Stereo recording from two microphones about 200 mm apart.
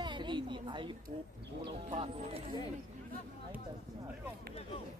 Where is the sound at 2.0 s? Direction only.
25° right (ahead or behind).